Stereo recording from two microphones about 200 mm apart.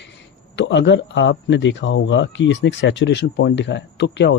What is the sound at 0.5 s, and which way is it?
Speech, 65° left (ahead or behind).